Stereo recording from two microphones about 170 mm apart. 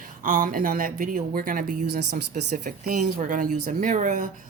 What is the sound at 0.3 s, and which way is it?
Speech, 55° right (ahead or behind).